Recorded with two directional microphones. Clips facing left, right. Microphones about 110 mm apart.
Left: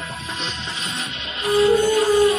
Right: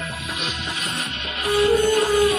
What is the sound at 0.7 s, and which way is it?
Music, 50° right (ahead or behind).